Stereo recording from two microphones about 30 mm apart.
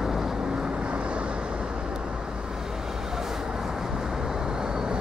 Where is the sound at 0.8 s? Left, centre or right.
Right.